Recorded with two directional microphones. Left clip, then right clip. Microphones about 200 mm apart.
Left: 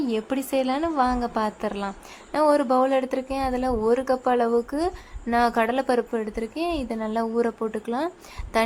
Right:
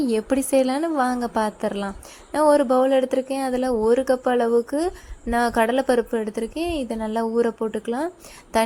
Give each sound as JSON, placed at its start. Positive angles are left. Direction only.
{"t": 0.0, "sound": "a woman's voice", "side_deg": -15}